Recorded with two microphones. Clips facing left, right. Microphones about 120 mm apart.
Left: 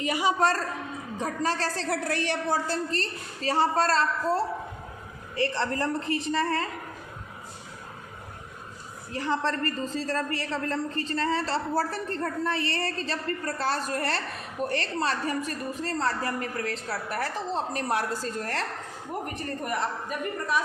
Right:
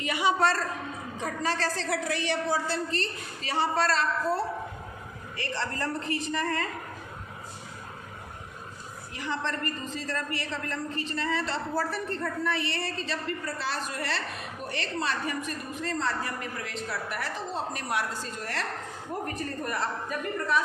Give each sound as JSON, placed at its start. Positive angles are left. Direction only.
{"t": 0.0, "sound": "a woman's voice", "side_deg": 40}
{"t": 5.4, "sound": "a woman's voice", "side_deg": 25}
{"t": 9.1, "sound": "a woman's voice", "side_deg": 35}
{"t": 19.3, "sound": "a woman's voice", "side_deg": 20}